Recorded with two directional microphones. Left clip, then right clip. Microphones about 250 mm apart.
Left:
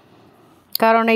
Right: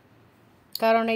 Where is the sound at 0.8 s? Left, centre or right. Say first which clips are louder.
Left 6 dB; left.